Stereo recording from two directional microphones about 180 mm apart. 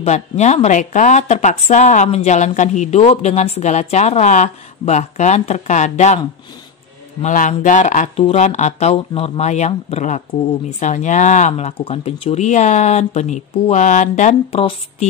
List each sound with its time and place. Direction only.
0.0 s a man's voice: 40° left (ahead or behind)